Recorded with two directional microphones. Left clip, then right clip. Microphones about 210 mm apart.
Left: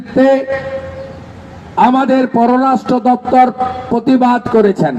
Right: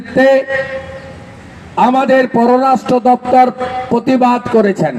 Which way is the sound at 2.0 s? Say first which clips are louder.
Right 2 dB; 45° right (ahead or behind).